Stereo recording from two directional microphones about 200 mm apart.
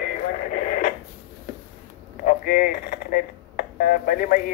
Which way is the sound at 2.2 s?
45° left (ahead or behind).